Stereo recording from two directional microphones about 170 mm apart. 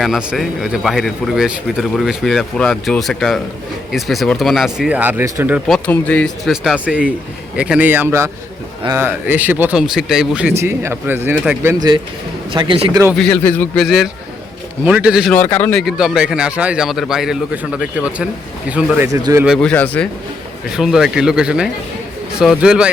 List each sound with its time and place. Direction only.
0.0 s speech: 5° right (ahead or behind)
5.6 s speech: 5° left (ahead or behind)
10.6 s speech: 15° right (ahead or behind)
12.5 s speech: 30° right (ahead or behind)
13.1 s speech: 5° left (ahead or behind)
13.8 s speech: centre (ahead or behind)
15.5 s speech: 5° left (ahead or behind)
19.0 s speech: 20° right (ahead or behind)
19.5 s speech: 10° left (ahead or behind)
20.7 s speech: 5° right (ahead or behind)